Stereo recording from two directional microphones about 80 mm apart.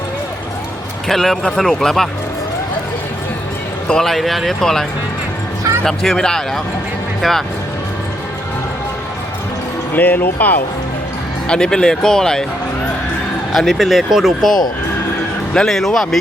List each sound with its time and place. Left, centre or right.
1.0 s a man's voice: centre
3.8 s a man's voice: centre
9.9 s speech: left
11.4 s speech: centre
13.5 s a man's voice: centre
15.5 s a man's voice: centre